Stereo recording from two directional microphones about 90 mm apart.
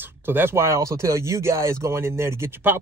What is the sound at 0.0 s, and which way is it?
Speech, 25° right (ahead or behind).